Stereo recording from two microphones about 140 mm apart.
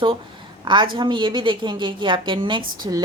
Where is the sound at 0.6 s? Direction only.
35° right (ahead or behind).